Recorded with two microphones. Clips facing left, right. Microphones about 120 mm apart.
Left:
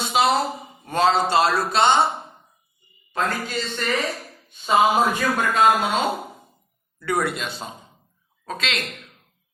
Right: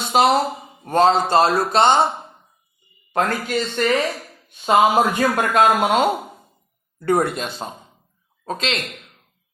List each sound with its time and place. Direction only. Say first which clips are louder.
0.1 s a sound: right 4 dB; 50° right (ahead or behind)
0.9 s a man's voice: right 4 dB; 45° right (ahead or behind)
3.1 s a man's voice: right 4 dB; 50° right (ahead or behind)
8.4 s speech: right 4 dB; 35° right (ahead or behind)